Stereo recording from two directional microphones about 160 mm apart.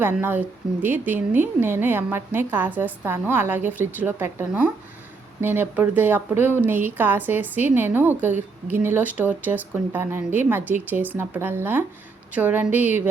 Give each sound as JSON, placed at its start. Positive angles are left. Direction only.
{"t": 0.0, "sound": "a woman's voice", "side_deg": -10}